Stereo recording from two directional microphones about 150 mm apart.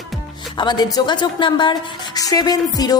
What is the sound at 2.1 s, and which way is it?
Music, 25° left (ahead or behind).